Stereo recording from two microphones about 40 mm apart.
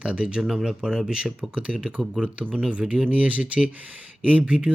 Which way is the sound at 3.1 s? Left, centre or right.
Right.